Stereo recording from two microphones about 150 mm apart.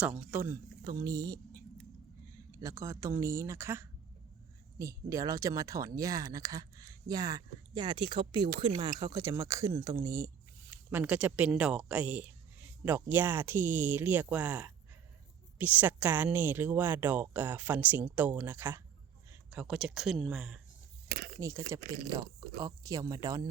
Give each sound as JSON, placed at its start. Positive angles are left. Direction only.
{"t": 0.0, "sound": "speech", "side_deg": -5}
{"t": 10.7, "sound": "speech", "side_deg": -10}
{"t": 19.5, "sound": "speech", "side_deg": -5}
{"t": 21.3, "sound": "speech", "side_deg": -20}